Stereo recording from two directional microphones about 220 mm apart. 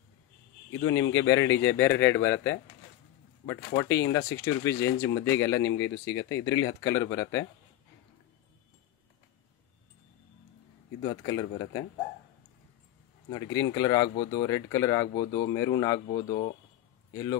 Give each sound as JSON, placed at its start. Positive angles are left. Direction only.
{"t": 0.7, "sound": "speech", "side_deg": 15}
{"t": 11.0, "sound": "speech", "side_deg": 15}
{"t": 13.3, "sound": "a man's voice", "side_deg": 15}